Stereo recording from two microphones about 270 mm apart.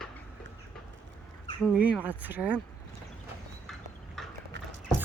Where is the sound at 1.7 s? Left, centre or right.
Centre.